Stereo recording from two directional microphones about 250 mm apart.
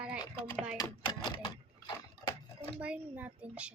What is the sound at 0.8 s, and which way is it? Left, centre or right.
Speech, centre.